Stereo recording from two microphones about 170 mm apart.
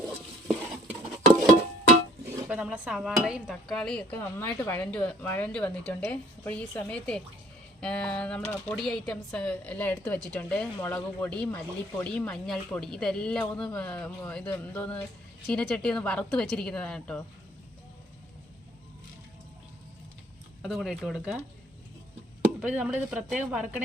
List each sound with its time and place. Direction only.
0.4 s stir: centre (ahead or behind)
2.2 s a sound: 20° right (ahead or behind)
2.5 s speech: 5° right (ahead or behind)
20.6 s speech: centre (ahead or behind)
22.6 s speech: 10° right (ahead or behind)